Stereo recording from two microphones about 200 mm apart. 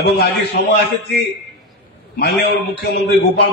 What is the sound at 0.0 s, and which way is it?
Speech, 55° left (ahead or behind).